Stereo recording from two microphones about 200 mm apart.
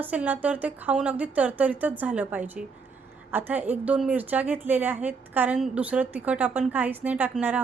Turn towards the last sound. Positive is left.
turn(degrees=-10)  # may be behind; listen again after turning